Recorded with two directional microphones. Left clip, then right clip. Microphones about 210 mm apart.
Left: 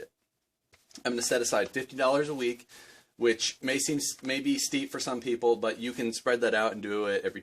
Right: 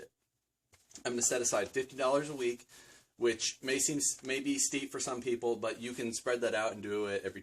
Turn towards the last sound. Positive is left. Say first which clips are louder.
# left 6 dB
turn(degrees=40)  # may be behind; listen again after turning